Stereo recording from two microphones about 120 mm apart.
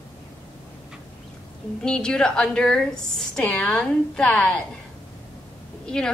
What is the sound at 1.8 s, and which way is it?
A woman's voice, 10° left (ahead or behind).